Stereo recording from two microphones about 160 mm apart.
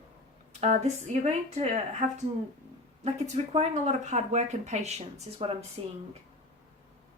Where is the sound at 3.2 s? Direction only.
45° right (ahead or behind).